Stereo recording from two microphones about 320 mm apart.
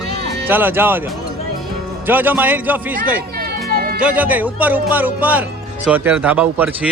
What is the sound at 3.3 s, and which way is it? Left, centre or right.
Music, right.